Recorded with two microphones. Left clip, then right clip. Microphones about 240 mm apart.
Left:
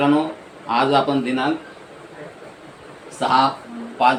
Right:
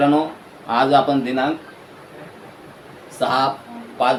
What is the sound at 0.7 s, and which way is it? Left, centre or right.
Speech, centre.